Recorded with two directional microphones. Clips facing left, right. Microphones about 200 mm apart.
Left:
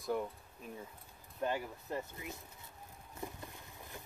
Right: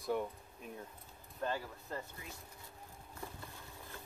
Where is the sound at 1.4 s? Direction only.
15° left (ahead or behind).